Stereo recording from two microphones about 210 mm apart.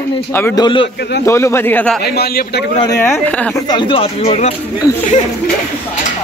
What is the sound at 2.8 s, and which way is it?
Speech, 15° left (ahead or behind).